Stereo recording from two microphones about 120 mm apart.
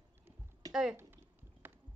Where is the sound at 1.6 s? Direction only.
20° right (ahead or behind).